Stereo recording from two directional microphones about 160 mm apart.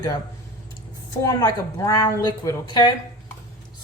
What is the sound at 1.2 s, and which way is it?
Speech, 20° left (ahead or behind).